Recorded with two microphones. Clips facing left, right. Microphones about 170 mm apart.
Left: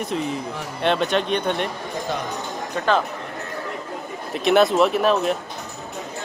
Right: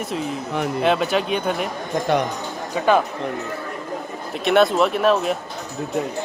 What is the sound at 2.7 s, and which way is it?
Speech, 10° right (ahead or behind).